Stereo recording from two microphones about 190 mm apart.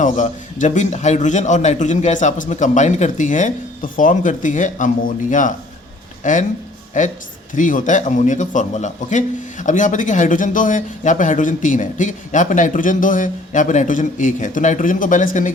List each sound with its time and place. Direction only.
0.0 s a man's voice: 40° left (ahead or behind)